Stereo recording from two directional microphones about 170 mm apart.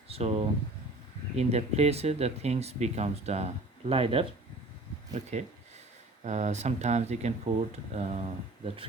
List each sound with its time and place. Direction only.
0.1 s speech: 40° right (ahead or behind)
5.3 s speech: 40° right (ahead or behind)